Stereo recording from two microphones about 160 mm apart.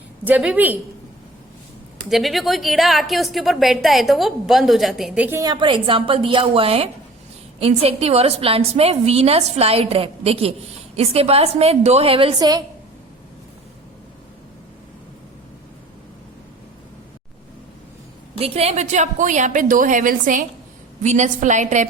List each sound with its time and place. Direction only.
0.3 s speech: 10° right (ahead or behind)
2.0 s a woman's voice: centre (ahead or behind)
5.4 s a woman's voice: 25° right (ahead or behind)
12.4 s a woman's voice: 25° right (ahead or behind)
18.3 s a woman's voice: 40° right (ahead or behind)